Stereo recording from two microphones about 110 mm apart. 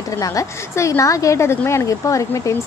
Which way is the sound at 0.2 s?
30° left (ahead or behind).